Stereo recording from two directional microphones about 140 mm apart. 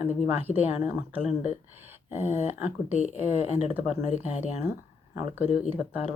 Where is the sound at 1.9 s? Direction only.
15° right (ahead or behind).